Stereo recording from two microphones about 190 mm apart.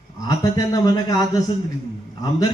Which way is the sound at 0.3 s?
20° left (ahead or behind).